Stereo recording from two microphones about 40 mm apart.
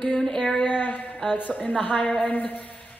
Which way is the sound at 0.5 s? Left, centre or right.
Left.